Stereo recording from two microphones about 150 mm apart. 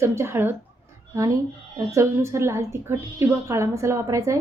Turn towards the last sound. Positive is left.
turn(degrees=-20)  # may be behind; listen again after turning